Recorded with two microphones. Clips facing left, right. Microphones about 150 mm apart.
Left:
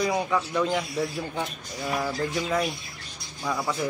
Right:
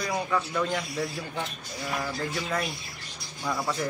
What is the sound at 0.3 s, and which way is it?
Speech, 10° left (ahead or behind).